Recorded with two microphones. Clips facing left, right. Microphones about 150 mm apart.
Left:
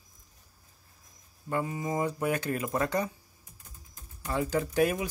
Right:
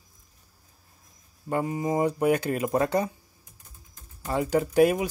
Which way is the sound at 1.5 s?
40° right (ahead or behind).